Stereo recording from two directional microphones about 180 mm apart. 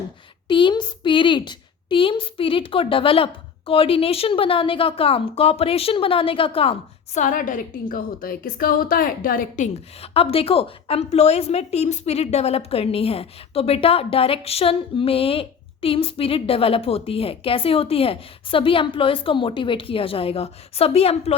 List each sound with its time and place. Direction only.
0.4 s a woman's voice: 25° left (ahead or behind); by 9.6 s 50° left (ahead or behind)
10.0 s a woman's voice: 30° left (ahead or behind)